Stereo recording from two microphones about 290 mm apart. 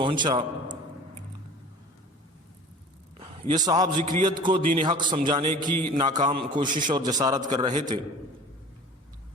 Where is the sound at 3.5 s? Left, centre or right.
Centre.